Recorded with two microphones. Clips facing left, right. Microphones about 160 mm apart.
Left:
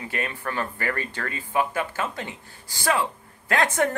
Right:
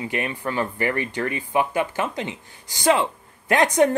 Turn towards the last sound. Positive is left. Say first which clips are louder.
# right 5 dB
turn(degrees=-20)  # may be behind; listen again after turning